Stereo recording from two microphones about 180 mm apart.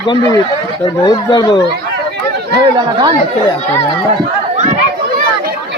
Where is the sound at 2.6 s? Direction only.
25° right (ahead or behind).